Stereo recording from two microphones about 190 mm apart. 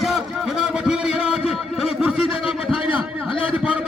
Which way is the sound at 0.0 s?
Centre (ahead or behind).